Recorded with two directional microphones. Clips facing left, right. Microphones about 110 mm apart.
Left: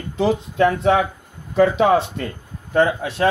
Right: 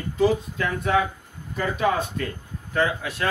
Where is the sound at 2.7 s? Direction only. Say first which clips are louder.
Left 6 dB; 25° left (ahead or behind).